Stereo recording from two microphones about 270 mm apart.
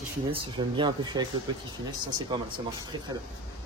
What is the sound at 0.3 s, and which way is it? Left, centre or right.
Speech, centre.